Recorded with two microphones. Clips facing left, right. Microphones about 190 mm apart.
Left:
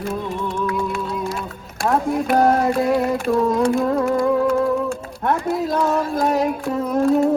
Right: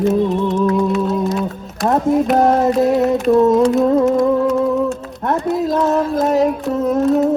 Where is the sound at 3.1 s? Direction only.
Centre (ahead or behind).